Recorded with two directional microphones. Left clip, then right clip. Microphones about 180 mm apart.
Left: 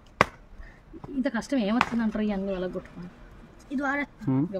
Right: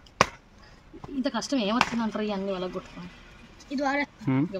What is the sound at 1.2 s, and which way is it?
Speech, 45° left (ahead or behind).